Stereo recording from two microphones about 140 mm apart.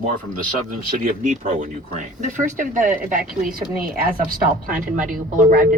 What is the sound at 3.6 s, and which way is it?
A woman's voice, 90° right.